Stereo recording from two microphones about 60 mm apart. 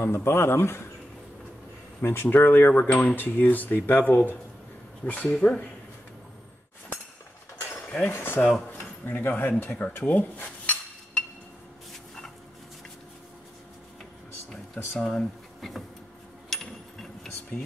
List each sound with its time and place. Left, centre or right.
0.0 s speech: left
2.0 s speech: left
2.7 s speech: left
8.0 s speech: left
8.7 s a sound: left
9.4 s speech: left
15.0 s speech: centre
16.4 s a sound: centre